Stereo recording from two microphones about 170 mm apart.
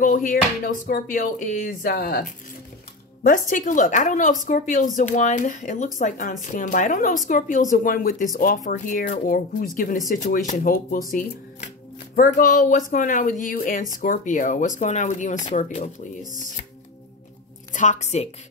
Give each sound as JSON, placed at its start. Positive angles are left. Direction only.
{"t": 0.0, "sound": "speech", "side_deg": 50}
{"t": 17.7, "sound": "speech", "side_deg": 40}